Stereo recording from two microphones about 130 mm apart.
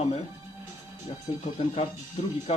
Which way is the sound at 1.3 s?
45° left (ahead or behind).